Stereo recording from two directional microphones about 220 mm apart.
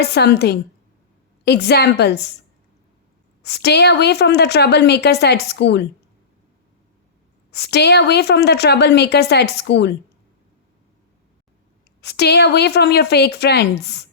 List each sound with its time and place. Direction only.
0.0 s a woman's voice: 50° left (ahead or behind)
3.4 s a woman's voice: 50° left (ahead or behind)
7.5 s a woman's voice: 50° left (ahead or behind)
12.0 s a woman's voice: 50° left (ahead or behind)